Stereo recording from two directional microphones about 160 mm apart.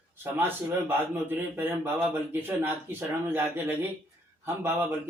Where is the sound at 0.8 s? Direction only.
15° right (ahead or behind).